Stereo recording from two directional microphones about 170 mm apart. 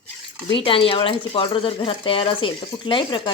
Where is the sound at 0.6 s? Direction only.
30° left (ahead or behind).